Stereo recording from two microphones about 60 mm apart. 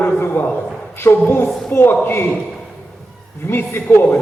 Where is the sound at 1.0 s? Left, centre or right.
Left.